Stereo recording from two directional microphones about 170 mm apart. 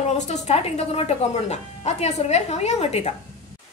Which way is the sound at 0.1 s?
40° left (ahead or behind).